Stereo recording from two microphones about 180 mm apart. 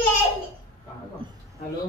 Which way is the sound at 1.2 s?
30° right (ahead or behind).